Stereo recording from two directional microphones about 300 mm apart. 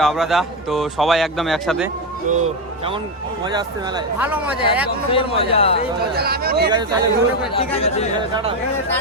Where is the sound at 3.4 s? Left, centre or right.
Centre.